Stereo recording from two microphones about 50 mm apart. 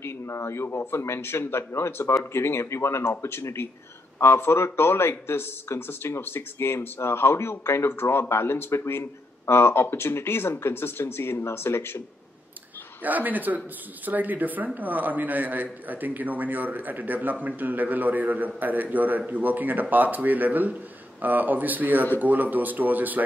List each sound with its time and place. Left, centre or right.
0.0 s speech: left
13.0 s a man's voice: right